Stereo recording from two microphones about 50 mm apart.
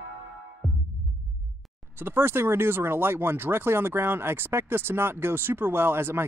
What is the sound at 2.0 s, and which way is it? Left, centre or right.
Speech, right.